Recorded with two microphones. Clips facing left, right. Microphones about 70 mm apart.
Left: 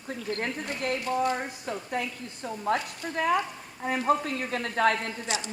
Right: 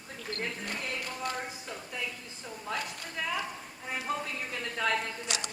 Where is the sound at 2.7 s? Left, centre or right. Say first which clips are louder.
Left 7 dB; left.